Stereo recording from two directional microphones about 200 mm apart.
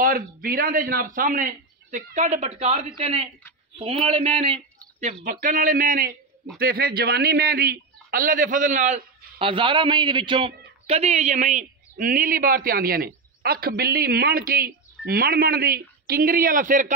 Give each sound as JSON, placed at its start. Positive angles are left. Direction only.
{"t": 0.0, "sound": "a man's voice", "side_deg": -45}